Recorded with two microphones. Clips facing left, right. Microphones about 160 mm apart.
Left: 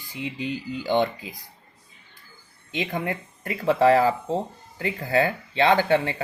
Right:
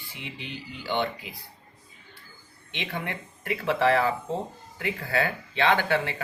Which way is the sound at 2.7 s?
35° left (ahead or behind).